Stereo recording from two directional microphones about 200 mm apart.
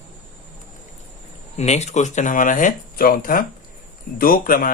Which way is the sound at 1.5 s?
35° left (ahead or behind).